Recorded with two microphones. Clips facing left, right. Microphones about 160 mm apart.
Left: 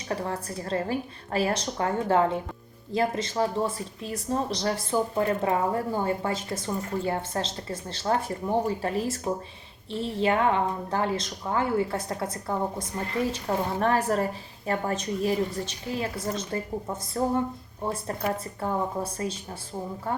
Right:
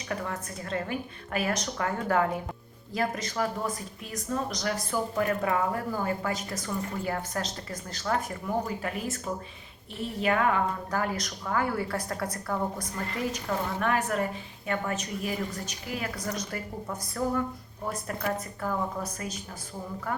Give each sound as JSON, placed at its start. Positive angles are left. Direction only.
{"t": 0.1, "sound": "a woman's voice", "side_deg": 30}